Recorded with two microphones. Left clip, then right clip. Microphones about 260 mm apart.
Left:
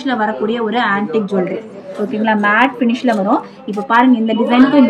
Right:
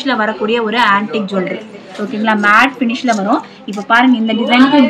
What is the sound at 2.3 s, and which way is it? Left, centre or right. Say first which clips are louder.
A woman's voice: right 3 dB; centre.